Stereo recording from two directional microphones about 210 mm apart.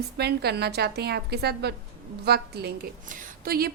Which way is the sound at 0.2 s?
50° right (ahead or behind).